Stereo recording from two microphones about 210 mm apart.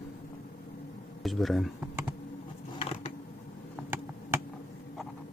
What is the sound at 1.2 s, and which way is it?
Speech, centre (ahead or behind).